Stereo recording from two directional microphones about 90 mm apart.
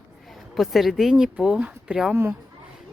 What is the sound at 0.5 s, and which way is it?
A woman's voice, centre (ahead or behind).